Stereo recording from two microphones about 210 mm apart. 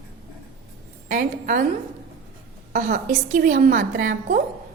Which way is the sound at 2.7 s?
40° right (ahead or behind).